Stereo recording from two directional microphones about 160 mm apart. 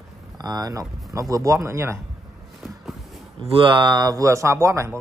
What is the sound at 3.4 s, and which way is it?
Speech, 35° right (ahead or behind).